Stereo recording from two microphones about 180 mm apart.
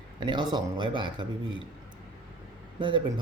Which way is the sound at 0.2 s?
25° right (ahead or behind).